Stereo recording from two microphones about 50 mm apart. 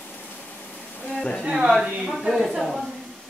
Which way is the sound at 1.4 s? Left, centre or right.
Centre.